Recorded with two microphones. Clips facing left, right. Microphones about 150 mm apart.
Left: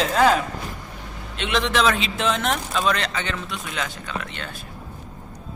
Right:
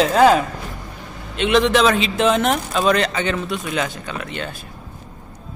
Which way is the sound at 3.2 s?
10° right (ahead or behind).